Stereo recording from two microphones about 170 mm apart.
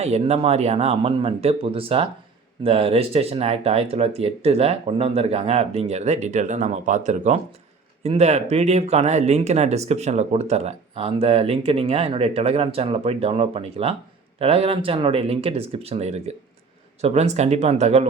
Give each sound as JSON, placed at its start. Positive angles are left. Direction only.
{"t": 0.0, "sound": "speech", "side_deg": -40}